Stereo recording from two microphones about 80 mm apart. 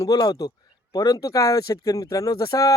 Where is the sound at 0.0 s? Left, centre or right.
Left.